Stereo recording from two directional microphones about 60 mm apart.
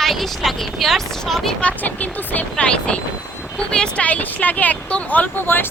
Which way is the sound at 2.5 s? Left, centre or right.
Centre.